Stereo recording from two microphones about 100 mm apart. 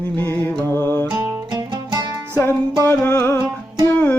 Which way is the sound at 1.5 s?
45° right (ahead or behind).